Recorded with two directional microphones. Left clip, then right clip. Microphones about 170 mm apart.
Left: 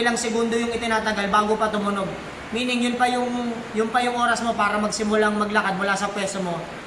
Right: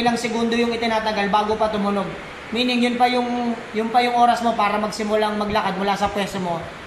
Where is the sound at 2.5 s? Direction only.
20° right (ahead or behind).